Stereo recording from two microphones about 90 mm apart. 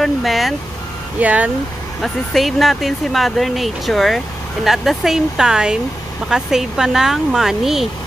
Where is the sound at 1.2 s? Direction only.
15° right (ahead or behind).